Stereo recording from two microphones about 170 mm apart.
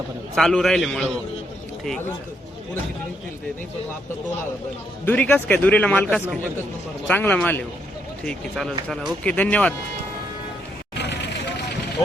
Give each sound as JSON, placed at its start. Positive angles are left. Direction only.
{"t": 0.3, "sound": "a man's voice", "side_deg": 0}
{"t": 5.0, "sound": "a man's voice", "side_deg": 10}
{"t": 10.9, "sound": "vehicle", "side_deg": 85}